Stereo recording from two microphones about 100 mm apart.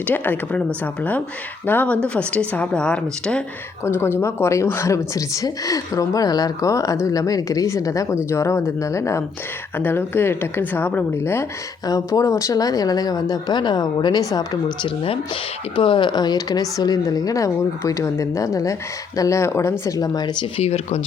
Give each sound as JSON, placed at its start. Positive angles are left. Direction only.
{"t": 0.1, "sound": "a woman's voice", "side_deg": 20}
{"t": 1.6, "sound": "a woman's voice", "side_deg": 20}
{"t": 3.8, "sound": "a woman's voice", "side_deg": 25}
{"t": 11.9, "sound": "speech", "side_deg": 35}
{"t": 14.8, "sound": "speech", "side_deg": 70}
{"t": 15.7, "sound": "speech", "side_deg": 55}
{"t": 19.8, "sound": "speech", "side_deg": 40}
{"t": 20.4, "sound": "speech", "side_deg": 90}